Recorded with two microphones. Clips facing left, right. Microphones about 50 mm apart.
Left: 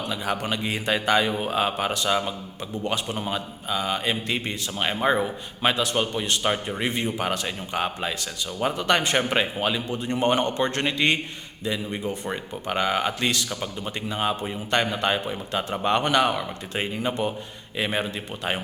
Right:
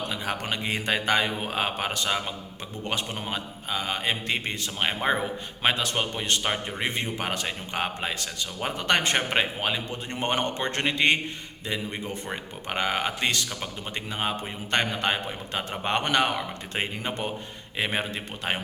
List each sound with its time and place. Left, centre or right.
0.1 s speech: right